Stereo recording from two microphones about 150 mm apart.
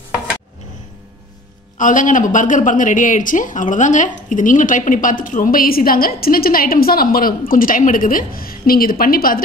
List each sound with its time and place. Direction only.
1.8 s speech: 60° left (ahead or behind)